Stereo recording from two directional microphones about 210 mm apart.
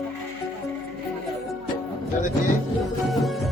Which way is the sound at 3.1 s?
Centre (ahead or behind).